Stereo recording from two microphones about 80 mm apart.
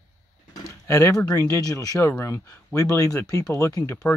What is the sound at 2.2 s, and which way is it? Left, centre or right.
Speech, left.